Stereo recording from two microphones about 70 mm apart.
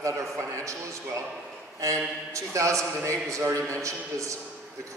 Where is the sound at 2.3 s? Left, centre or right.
Right.